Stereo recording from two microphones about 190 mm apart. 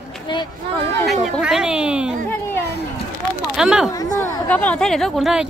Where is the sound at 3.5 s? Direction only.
5° right (ahead or behind).